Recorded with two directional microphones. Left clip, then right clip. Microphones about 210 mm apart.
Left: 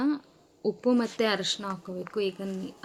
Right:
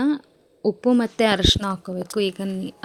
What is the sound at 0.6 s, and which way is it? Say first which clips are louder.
Speech: right 6 dB; 30° right (ahead or behind).